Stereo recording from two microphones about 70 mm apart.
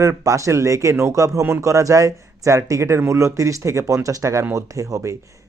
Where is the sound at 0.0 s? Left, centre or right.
Right.